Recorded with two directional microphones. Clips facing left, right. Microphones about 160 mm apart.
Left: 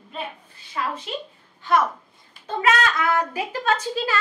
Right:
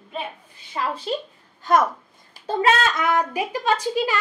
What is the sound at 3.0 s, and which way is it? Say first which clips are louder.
A woman's voice: right 1 dB; 15° right (ahead or behind).